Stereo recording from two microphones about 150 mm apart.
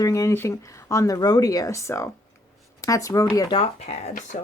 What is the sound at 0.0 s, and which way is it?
Speech, 20° left (ahead or behind).